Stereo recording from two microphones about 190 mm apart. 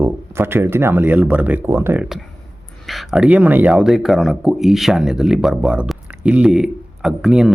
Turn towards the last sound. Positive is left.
turn(degrees=-5)  # may be behind; listen again after turning